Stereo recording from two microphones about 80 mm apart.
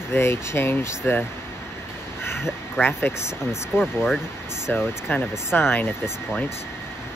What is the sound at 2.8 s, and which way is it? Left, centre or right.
Speech, left.